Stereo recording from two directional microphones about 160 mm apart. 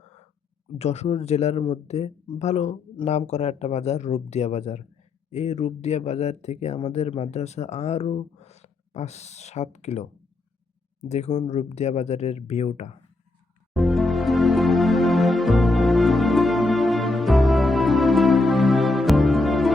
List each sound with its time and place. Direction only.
0.8 s speech: 40° left (ahead or behind)
11.1 s speech: 45° left (ahead or behind)
13.7 s music: centre (ahead or behind)